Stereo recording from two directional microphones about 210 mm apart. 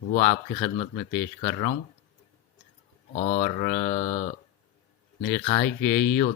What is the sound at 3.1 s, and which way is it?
Speech, 35° left (ahead or behind).